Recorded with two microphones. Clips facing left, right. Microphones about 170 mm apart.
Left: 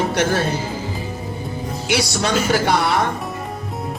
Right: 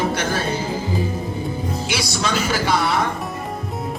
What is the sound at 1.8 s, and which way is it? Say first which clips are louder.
Speech: left 6 dB; 65° left (ahead or behind).